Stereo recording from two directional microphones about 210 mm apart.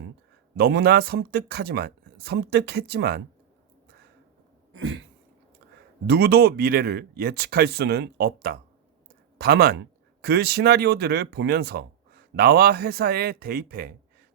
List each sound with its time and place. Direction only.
0.5 s speech: 50° right (ahead or behind)
4.7 s throat clearing: 65° right (ahead or behind)
6.1 s speech: 50° right (ahead or behind)